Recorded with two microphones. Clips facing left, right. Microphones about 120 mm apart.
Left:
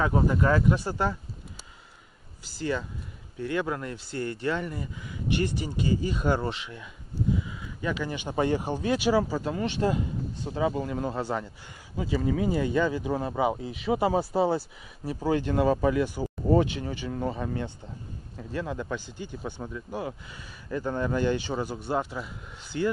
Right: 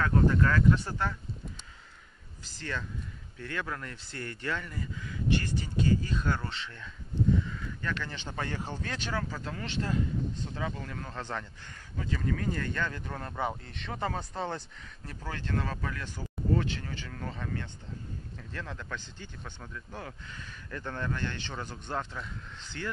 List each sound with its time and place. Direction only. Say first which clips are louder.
0.0 s speech: left 2 dB; 15° left (ahead or behind)
2.4 s speech: left 8 dB; 10° left (ahead or behind)